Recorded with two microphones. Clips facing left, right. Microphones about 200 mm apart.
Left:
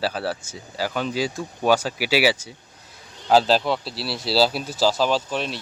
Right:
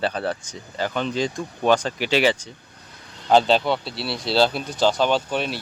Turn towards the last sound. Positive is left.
turn(degrees=0)  # may be behind; listen again after turning